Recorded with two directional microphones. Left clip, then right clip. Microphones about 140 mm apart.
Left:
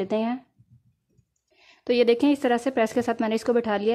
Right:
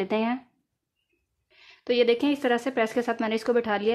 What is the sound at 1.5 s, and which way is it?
Speech, 25° left (ahead or behind).